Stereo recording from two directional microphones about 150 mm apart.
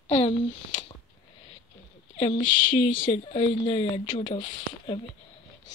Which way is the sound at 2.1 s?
40° left (ahead or behind).